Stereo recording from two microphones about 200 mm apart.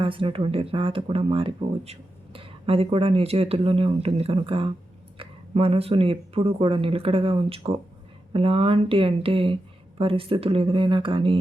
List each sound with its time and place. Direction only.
0.0 s speech: 25° right (ahead or behind)